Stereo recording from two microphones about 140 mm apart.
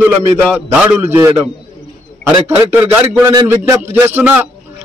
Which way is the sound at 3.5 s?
20° right (ahead or behind).